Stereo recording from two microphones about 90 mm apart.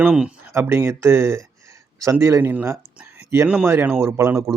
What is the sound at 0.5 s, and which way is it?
Speech, 25° right (ahead or behind).